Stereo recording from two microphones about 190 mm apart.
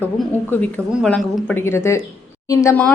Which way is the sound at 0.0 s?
10° left (ahead or behind).